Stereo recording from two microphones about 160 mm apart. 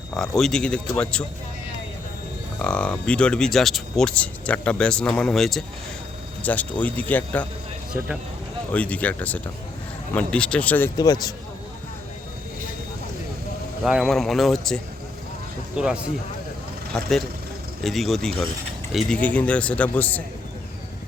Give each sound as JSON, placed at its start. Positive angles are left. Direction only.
{"t": 0.2, "sound": "speech", "side_deg": 5}
{"t": 2.6, "sound": "speech", "side_deg": 5}
{"t": 8.7, "sound": "speech", "side_deg": 10}
{"t": 10.9, "sound": "speech", "side_deg": 25}
{"t": 13.8, "sound": "speech", "side_deg": -5}